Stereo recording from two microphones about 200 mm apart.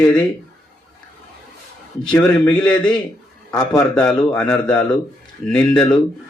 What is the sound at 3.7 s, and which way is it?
A man's voice, 5° left (ahead or behind).